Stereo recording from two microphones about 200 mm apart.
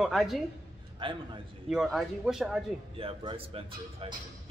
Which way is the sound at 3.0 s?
30° right (ahead or behind).